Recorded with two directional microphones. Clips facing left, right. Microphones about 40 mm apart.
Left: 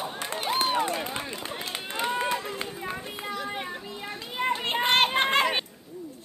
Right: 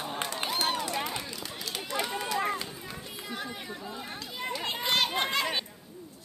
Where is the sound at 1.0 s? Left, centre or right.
Left.